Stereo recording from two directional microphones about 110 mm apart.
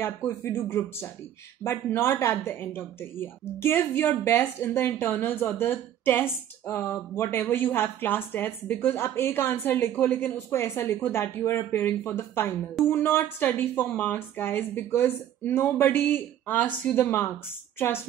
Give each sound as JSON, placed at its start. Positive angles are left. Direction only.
{"t": 0.0, "sound": "speech", "side_deg": 25}